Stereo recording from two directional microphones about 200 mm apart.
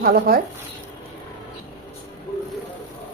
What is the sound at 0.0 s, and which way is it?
Speech, 50° right (ahead or behind).